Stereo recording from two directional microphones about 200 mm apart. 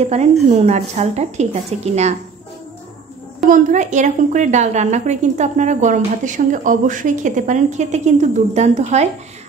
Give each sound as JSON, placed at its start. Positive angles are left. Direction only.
{"t": 0.0, "sound": "a woman's voice", "side_deg": -35}
{"t": 3.4, "sound": "a woman's voice", "side_deg": -40}